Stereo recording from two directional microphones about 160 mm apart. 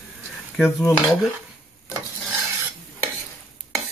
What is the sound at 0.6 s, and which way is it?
Stir, 5° right (ahead or behind).